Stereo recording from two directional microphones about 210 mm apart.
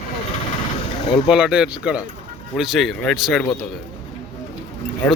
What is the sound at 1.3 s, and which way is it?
Speech, 5° right (ahead or behind).